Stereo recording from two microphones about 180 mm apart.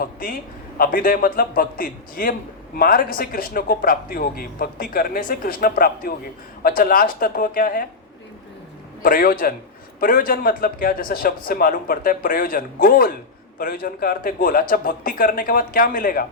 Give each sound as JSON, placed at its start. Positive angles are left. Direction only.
{"t": 0.0, "sound": "a sound", "side_deg": 55}
{"t": 0.8, "sound": "a man's voice", "side_deg": 55}
{"t": 9.0, "sound": "a man's voice", "side_deg": 50}